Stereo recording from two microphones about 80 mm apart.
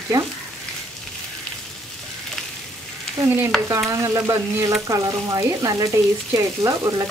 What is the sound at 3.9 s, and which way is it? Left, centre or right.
Speech, right.